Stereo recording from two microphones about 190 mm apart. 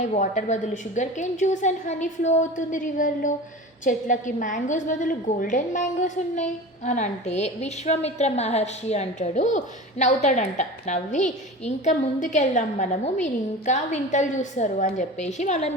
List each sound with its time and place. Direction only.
0.0 s a woman's voice: 40° left (ahead or behind)